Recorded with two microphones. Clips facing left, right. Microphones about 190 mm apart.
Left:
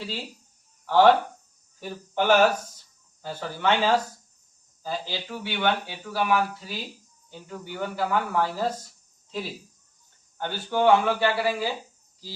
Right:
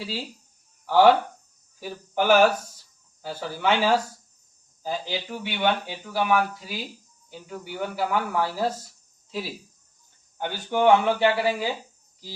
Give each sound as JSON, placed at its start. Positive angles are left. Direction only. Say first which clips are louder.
{"t": 0.9, "sound": "speech", "louder": "right 1 dB", "side_deg": -10}
{"t": 10.3, "sound": "speech", "louder": "right 1 dB", "side_deg": -15}